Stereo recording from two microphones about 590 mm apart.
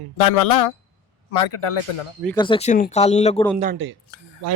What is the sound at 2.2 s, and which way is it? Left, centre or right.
Speech, centre.